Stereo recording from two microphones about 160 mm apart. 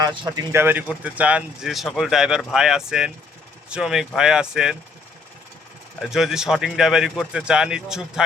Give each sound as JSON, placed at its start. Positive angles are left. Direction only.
{"t": 0.0, "sound": "speech", "side_deg": -25}
{"t": 0.5, "sound": "speech", "side_deg": -15}
{"t": 6.0, "sound": "speech", "side_deg": -5}